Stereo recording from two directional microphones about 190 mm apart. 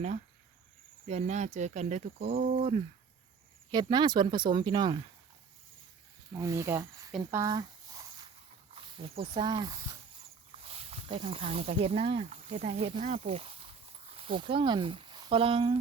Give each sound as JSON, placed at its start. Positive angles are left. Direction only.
{"t": 1.0, "sound": "speech", "side_deg": -35}
{"t": 6.3, "sound": "speech", "side_deg": -15}
{"t": 7.2, "sound": "a sound", "side_deg": -15}
{"t": 8.7, "sound": "speech", "side_deg": -30}